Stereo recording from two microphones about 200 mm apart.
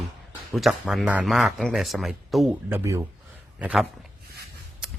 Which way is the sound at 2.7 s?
15° right (ahead or behind).